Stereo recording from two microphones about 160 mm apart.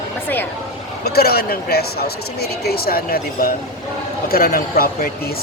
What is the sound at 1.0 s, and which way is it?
Speech, 75° left (ahead or behind).